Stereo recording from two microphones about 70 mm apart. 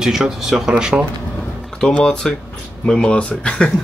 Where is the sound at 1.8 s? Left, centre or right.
Centre.